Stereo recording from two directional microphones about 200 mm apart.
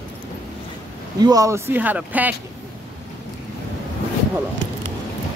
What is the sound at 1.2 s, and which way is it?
Speech, 20° right (ahead or behind).